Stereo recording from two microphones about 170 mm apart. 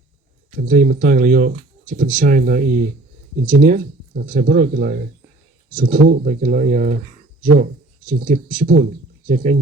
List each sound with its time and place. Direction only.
0.5 s speech: 50° right (ahead or behind)